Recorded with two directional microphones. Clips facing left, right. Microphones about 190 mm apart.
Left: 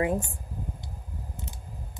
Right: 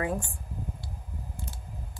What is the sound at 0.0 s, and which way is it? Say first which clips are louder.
Speech: left 4 dB; 20° left (ahead or behind).